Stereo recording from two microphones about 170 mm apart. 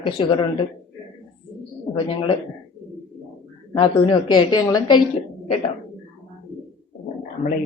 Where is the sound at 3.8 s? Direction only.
25° left (ahead or behind).